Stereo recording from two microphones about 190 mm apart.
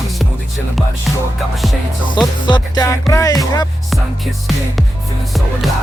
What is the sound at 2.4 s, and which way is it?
Music, 25° left (ahead or behind).